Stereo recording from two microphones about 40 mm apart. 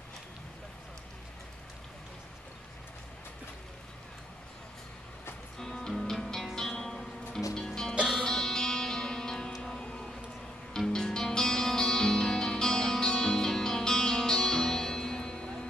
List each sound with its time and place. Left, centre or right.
5.6 s music: centre
7.9 s music: right
8.3 s music: centre